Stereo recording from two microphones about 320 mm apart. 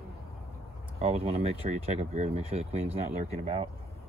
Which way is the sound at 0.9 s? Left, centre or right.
Centre.